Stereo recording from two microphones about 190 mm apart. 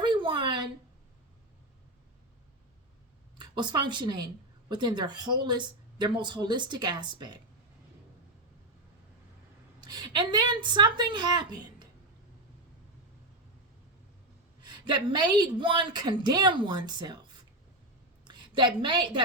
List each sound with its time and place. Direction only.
0.0 s a sound: 25° right (ahead or behind)
3.3 s speech: 25° right (ahead or behind)
9.8 s speech: 20° right (ahead or behind)
14.6 s speech: 25° right (ahead or behind)
18.3 s a woman's voice: 25° right (ahead or behind)